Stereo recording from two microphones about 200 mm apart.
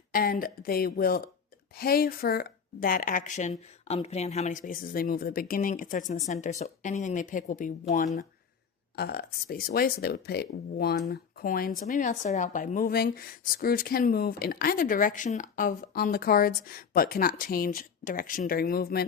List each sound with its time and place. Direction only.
0.1 s speech: 45° left (ahead or behind)
9.0 s speech: 50° left (ahead or behind)